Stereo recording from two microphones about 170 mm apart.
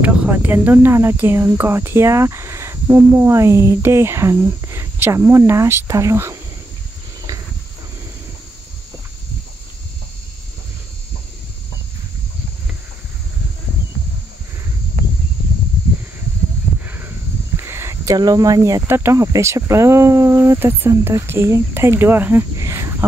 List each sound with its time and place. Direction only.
0.0 s speech: 10° right (ahead or behind)
16.8 s a sound: 10° right (ahead or behind)
17.6 s speech: 15° right (ahead or behind)